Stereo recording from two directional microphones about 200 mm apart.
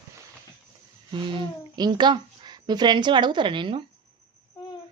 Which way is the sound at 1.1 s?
20° right (ahead or behind).